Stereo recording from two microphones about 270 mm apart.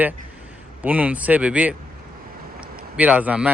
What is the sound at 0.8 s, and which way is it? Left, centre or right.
Speech, centre.